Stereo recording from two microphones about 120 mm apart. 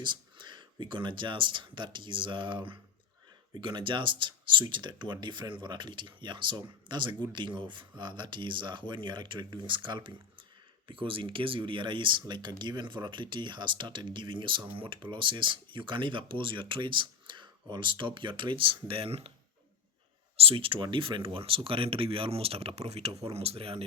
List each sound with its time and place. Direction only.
0.0 s speech: 40° right (ahead or behind)
20.3 s speech: 55° right (ahead or behind)